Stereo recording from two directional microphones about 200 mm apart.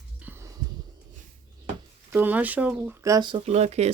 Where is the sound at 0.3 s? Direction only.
15° right (ahead or behind).